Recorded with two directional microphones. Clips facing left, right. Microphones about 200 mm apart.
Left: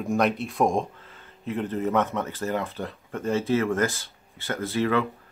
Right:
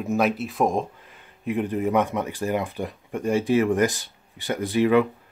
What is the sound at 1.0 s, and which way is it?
Speech, 15° right (ahead or behind).